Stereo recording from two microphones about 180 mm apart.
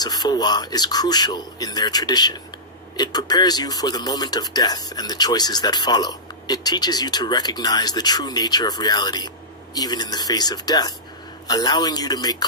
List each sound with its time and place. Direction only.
0.0 s speech: 20° left (ahead or behind)